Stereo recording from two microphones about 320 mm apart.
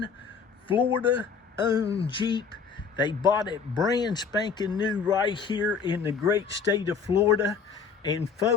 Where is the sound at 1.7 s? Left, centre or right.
Centre.